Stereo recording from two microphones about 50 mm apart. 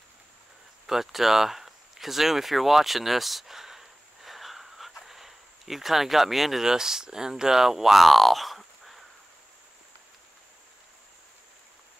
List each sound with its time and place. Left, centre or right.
0.8 s speech: centre